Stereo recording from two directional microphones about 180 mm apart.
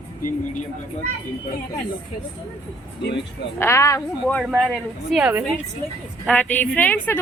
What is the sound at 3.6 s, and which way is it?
Speech, 15° left (ahead or behind).